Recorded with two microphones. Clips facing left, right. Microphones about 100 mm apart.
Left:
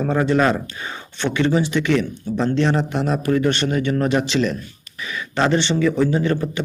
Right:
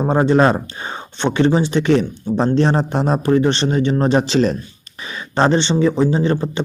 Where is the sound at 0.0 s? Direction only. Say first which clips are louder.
Right 4 dB; 30° right (ahead or behind).